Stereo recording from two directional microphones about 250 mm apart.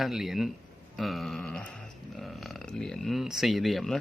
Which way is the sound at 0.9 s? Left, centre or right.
Centre.